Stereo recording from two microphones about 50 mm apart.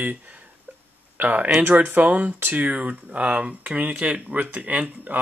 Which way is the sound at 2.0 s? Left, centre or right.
Right.